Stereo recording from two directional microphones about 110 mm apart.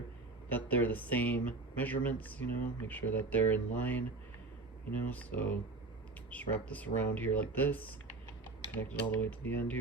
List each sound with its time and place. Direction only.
0.4 s speech: 15° left (ahead or behind)